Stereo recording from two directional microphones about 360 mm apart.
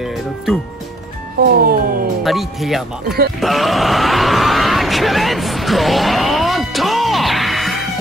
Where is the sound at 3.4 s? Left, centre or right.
Centre.